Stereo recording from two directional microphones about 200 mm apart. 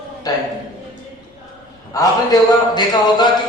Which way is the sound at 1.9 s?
20° left (ahead or behind).